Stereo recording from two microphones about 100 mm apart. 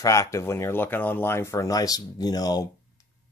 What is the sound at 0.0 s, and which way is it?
Speech, 30° left (ahead or behind).